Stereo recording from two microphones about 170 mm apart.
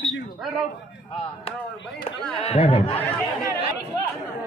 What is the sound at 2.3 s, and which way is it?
Speech, 35° left (ahead or behind).